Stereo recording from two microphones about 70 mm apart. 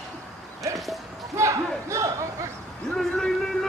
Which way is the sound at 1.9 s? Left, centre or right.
Right.